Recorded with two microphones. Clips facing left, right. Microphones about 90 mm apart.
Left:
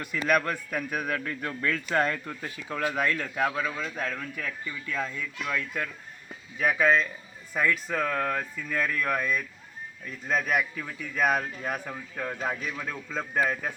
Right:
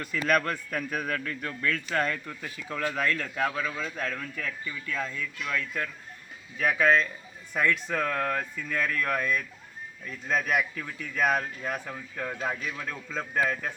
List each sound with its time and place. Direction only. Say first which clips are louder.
0.0 s speech: even; 10° left (ahead or behind)
2.4 s speech: left 2 dB; 10° left (ahead or behind)